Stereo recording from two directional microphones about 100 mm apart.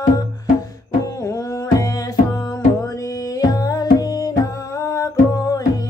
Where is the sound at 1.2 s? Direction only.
35° left (ahead or behind).